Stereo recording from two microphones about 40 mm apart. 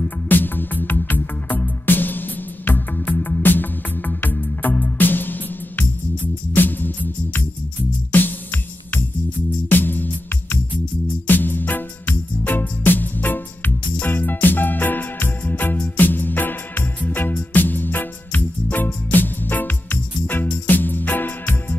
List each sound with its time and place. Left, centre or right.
0.0 s music: left
8.1 s music: left
9.7 s music: left